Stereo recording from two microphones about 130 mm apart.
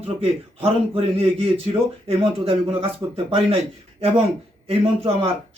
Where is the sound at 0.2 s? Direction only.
50° right (ahead or behind).